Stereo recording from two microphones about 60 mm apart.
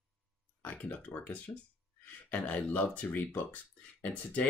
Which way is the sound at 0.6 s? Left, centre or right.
Left.